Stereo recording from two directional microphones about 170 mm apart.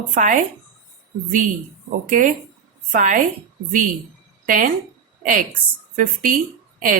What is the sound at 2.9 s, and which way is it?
Speech, 50° right (ahead or behind).